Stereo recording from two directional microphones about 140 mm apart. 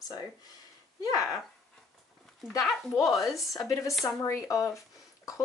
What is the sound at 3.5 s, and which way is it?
Speech, 20° left (ahead or behind).